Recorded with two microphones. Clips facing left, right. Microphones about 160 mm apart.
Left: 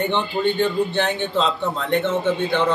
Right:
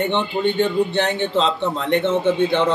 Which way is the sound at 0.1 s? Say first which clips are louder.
Right 1 dB; 20° right (ahead or behind).